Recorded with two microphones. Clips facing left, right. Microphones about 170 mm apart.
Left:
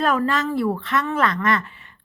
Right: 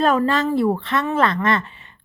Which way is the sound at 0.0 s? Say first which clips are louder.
Right 3 dB; 25° right (ahead or behind).